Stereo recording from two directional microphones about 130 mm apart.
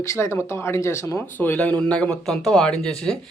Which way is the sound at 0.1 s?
20° left (ahead or behind).